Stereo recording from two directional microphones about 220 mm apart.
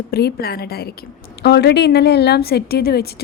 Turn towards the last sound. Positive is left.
turn(degrees=45)  # may be behind; listen again after turning